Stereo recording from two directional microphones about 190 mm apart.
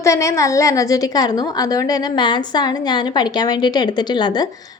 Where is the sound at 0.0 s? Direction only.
15° left (ahead or behind).